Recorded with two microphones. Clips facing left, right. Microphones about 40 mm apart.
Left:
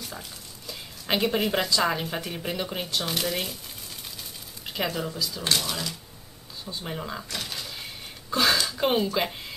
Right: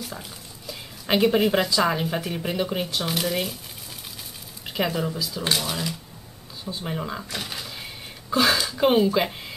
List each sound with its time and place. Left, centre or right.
0.0 s speech: centre
4.6 s speech: centre
6.6 s a sound: centre